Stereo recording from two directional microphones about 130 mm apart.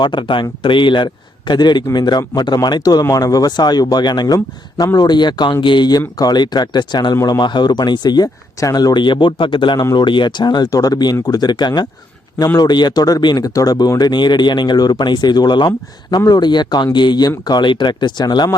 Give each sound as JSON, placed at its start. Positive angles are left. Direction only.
{"t": 0.0, "sound": "a man's voice", "side_deg": 35}
{"t": 4.4, "sound": "speech", "side_deg": 20}
{"t": 4.9, "sound": "a man's voice", "side_deg": 35}